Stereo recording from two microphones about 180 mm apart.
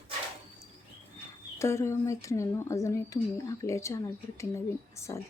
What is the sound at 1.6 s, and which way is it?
Speech, 15° left (ahead or behind).